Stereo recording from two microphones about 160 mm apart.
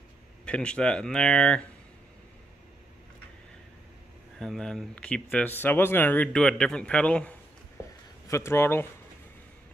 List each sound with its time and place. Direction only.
0.5 s speech: 5° left (ahead or behind)
4.4 s speech: 5° left (ahead or behind)